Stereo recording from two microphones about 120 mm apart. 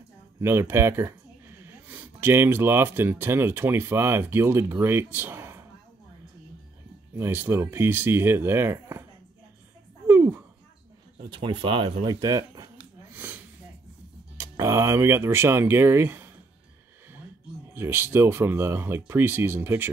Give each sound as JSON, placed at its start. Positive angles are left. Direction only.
{"t": 0.4, "sound": "speech", "side_deg": -20}
{"t": 7.2, "sound": "speech", "side_deg": -20}
{"t": 10.0, "sound": "a sound", "side_deg": -20}
{"t": 11.2, "sound": "speech", "side_deg": -45}
{"t": 12.0, "sound": "speech", "side_deg": -35}
{"t": 13.1, "sound": "snort", "side_deg": -15}
{"t": 14.3, "sound": "speech", "side_deg": -25}
{"t": 17.7, "sound": "speech", "side_deg": -20}